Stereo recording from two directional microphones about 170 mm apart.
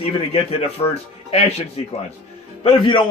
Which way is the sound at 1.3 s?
35° left (ahead or behind).